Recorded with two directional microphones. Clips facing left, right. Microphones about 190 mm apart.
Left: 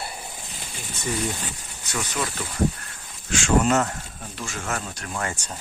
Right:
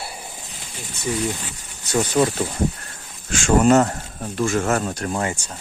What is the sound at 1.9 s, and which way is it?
Speech, 35° right (ahead or behind).